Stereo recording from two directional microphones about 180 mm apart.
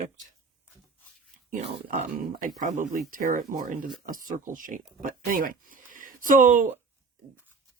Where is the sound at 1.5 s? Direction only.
45° right (ahead or behind).